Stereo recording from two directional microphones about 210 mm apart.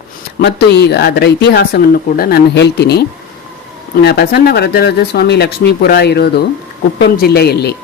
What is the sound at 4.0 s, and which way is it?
Speech, 50° left (ahead or behind).